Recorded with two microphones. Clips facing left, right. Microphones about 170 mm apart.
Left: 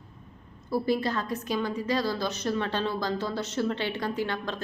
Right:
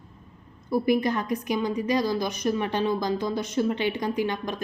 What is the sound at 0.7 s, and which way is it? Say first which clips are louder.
A woman's voice: right 4 dB; 15° right (ahead or behind).